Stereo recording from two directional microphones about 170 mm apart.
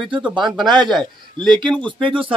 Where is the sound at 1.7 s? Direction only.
5° left (ahead or behind).